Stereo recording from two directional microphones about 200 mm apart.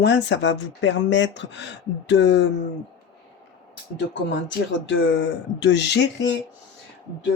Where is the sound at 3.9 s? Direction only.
65° left (ahead or behind).